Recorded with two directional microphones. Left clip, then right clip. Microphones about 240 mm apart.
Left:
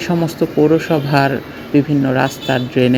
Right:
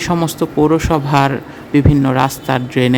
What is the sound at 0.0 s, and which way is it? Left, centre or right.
Speech, centre.